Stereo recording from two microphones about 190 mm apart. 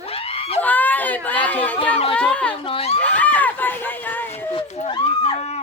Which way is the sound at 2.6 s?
30° left (ahead or behind).